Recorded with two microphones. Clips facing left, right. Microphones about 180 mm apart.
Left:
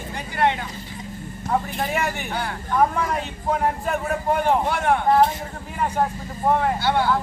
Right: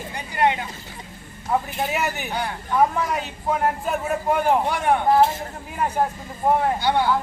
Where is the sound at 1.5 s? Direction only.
5° right (ahead or behind).